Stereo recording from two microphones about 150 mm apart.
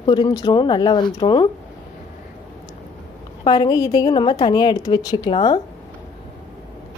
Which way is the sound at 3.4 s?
25° left (ahead or behind).